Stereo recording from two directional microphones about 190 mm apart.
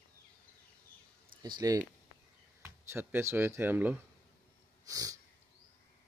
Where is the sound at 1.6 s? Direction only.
20° right (ahead or behind).